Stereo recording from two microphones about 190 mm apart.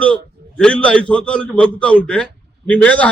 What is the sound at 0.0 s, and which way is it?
A man's voice, 5° left (ahead or behind).